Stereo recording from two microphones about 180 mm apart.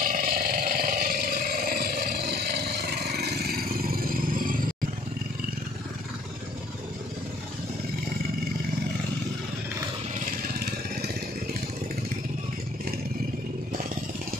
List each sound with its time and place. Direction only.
0.0 s roar: 50° right (ahead or behind)